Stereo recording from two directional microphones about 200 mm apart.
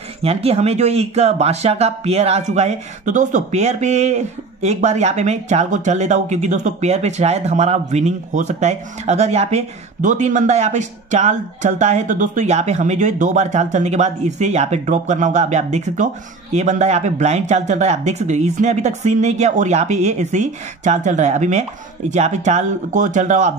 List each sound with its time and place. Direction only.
0.2 s speech: 30° right (ahead or behind)